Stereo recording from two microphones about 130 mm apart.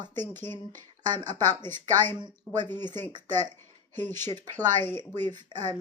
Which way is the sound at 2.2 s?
35° right (ahead or behind).